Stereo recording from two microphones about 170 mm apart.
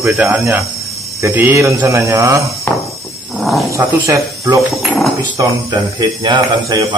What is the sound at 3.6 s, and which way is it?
Speech, 20° right (ahead or behind).